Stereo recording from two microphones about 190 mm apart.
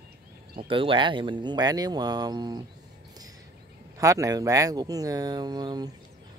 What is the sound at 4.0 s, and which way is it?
Speech, 15° right (ahead or behind).